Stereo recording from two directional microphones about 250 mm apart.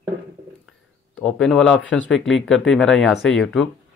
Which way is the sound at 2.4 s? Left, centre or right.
Centre.